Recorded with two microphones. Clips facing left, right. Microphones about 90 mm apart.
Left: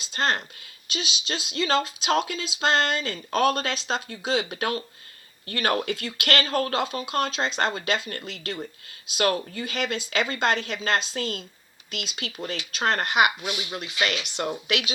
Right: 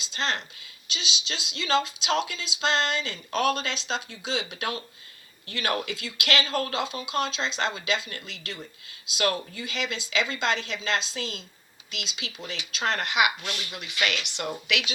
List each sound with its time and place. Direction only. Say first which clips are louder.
0.0 s speech: left 4 dB; 45° left (ahead or behind)
13.4 s speech: left 4 dB; 10° left (ahead or behind)
14.0 s speech: left 2 dB; 40° left (ahead or behind)